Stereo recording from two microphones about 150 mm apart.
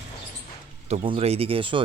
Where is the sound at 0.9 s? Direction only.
40° right (ahead or behind).